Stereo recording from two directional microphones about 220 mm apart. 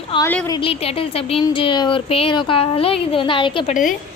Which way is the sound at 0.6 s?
25° left (ahead or behind).